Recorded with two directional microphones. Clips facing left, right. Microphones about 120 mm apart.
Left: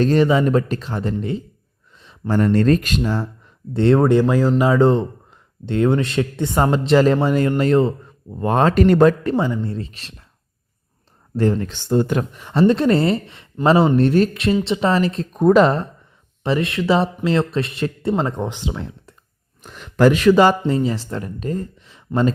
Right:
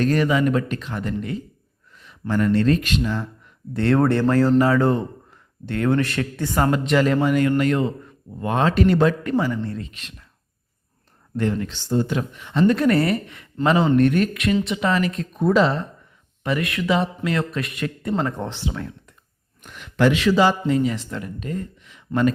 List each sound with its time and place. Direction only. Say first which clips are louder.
0.0 s speech: left 4 dB; 30° left (ahead or behind)
3.8 s speech: left 4 dB; 20° left (ahead or behind); by 9.1 s 45° left (ahead or behind)
9.2 s speech: left 2 dB; 20° left (ahead or behind)
11.3 s speech: left 4 dB; 35° left (ahead or behind)
11.7 s speech: left 4 dB; 55° left (ahead or behind)
16.4 s speech: left 4 dB; 30° left (ahead or behind)
19.6 s speech: left 4 dB; 35° left (ahead or behind); by 20.6 s 55° left (ahead or behind)
20.7 s speech: left 1 dB; 35° left (ahead or behind)